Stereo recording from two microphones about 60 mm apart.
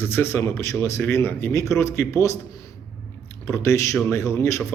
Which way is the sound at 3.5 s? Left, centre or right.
Left.